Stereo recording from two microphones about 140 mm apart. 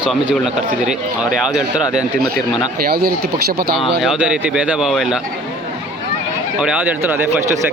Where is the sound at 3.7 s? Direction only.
5° right (ahead or behind).